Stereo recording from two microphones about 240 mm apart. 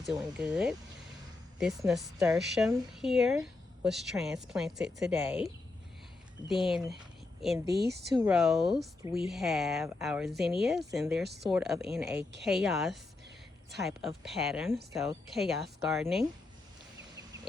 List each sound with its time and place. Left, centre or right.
0.0 s speech: centre
6.5 s speech: centre
7.7 s speech: right
8.3 s speech: centre